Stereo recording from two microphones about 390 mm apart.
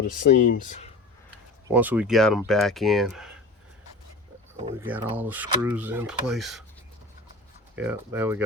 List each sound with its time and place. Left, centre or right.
0.0 s speech: centre
1.6 s speech: centre
4.6 s speech: centre
7.8 s speech: centre